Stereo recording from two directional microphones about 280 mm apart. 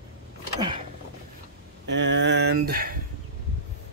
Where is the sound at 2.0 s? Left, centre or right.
Right.